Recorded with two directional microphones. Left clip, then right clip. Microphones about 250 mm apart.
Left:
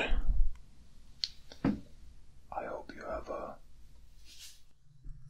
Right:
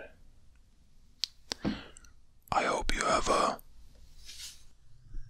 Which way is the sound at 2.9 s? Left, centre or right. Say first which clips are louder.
Right 12 dB; right.